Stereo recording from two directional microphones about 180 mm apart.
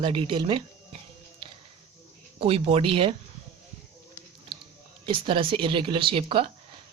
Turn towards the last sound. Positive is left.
turn(degrees=-30)  # may be behind; listen again after turning